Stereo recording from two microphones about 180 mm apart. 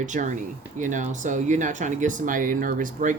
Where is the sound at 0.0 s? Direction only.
45° right (ahead or behind).